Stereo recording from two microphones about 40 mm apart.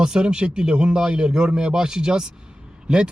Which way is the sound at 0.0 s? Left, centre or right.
Centre.